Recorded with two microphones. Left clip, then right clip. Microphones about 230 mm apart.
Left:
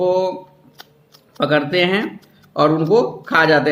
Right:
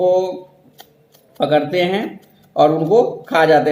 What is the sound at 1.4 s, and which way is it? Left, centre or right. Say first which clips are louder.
Speech: right 1 dB; centre.